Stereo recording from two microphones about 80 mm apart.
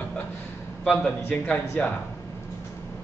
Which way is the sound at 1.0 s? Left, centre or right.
Centre.